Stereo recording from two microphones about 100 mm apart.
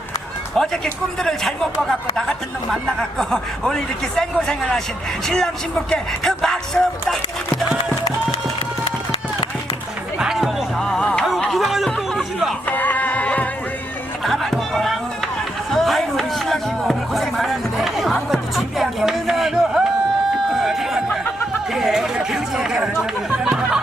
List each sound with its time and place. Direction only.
0.5 s speech: 5° left (ahead or behind)
10.2 s music: 5° right (ahead or behind)
10.8 s speech: 5° left (ahead or behind)
11.4 s music: centre (ahead or behind)
11.9 s a sound: centre (ahead or behind)
12.6 s music: 20° left (ahead or behind)
14.3 s music: centre (ahead or behind)
15.7 s a sound: 5° left (ahead or behind)
21.8 s speech: 5° right (ahead or behind)